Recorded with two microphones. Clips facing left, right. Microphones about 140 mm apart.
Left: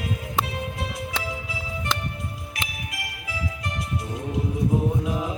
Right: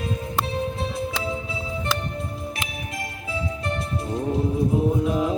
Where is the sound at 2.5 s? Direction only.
30° right (ahead or behind).